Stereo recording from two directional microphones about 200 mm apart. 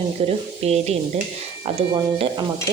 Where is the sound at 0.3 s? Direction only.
30° right (ahead or behind).